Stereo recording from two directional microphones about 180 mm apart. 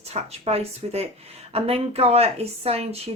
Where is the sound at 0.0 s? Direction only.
35° right (ahead or behind).